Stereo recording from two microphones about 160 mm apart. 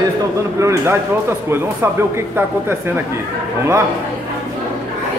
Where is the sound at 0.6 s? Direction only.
20° right (ahead or behind).